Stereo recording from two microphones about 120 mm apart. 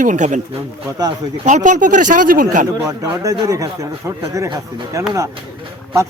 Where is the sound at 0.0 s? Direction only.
90° right.